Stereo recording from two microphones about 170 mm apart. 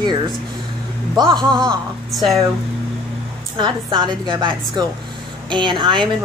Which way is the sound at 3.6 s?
30° right (ahead or behind).